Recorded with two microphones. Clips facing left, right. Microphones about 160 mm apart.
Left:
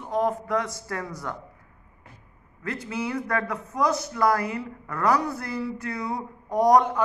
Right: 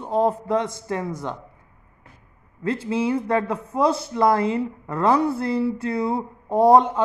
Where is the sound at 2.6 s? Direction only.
30° right (ahead or behind).